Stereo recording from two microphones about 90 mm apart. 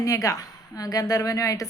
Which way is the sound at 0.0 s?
40° left (ahead or behind).